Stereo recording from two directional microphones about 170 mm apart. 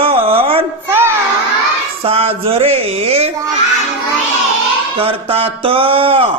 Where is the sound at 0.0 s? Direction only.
35° right (ahead or behind).